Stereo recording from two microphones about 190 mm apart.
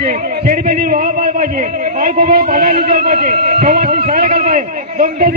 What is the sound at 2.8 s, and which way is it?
A man's voice, 45° right (ahead or behind).